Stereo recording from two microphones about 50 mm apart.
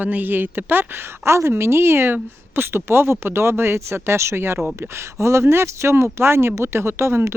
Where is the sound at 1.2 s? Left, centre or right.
Right.